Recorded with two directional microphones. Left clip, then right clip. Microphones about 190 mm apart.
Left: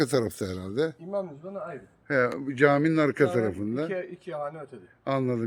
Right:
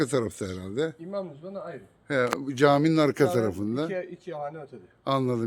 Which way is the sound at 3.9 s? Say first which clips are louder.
Even; 5° left (ahead or behind).